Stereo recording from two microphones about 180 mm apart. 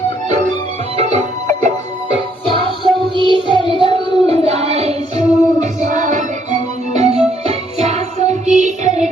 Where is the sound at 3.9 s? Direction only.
35° right (ahead or behind).